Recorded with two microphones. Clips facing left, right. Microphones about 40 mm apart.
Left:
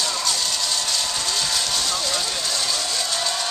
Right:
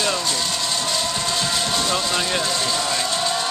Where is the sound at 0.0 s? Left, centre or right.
Right.